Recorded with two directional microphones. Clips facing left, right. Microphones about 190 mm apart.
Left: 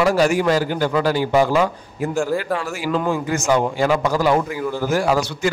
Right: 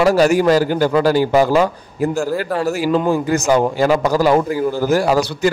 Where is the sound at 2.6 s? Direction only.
40° right (ahead or behind).